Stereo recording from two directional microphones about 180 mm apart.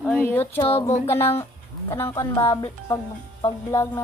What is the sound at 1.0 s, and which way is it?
A child's voice, 15° left (ahead or behind).